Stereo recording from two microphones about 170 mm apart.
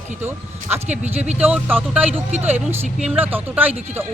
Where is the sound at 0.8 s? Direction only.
40° right (ahead or behind).